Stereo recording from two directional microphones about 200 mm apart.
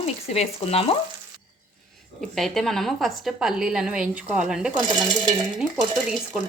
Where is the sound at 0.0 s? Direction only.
30° left (ahead or behind).